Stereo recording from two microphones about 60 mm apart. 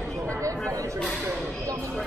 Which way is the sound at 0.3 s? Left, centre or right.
Right.